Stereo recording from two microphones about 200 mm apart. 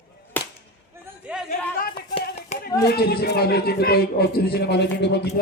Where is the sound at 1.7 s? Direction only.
45° left (ahead or behind).